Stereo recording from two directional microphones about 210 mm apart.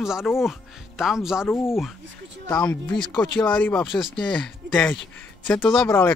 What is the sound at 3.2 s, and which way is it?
Speech, 5° left (ahead or behind).